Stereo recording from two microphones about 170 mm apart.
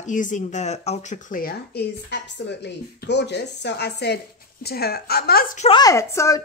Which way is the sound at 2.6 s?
90° left.